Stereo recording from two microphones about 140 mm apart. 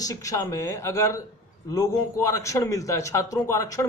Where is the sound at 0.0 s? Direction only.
25° left (ahead or behind).